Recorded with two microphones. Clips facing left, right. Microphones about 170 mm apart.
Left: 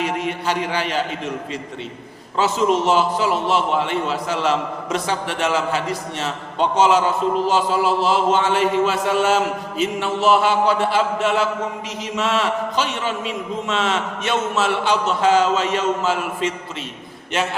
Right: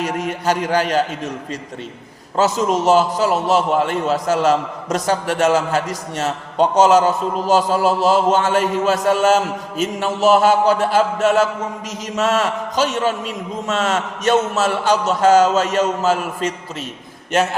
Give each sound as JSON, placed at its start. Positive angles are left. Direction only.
{"t": 0.0, "sound": "a man's voice", "side_deg": -45}
{"t": 2.3, "sound": "a man's voice", "side_deg": -40}